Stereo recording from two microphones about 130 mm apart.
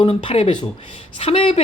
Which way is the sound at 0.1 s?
45° left (ahead or behind).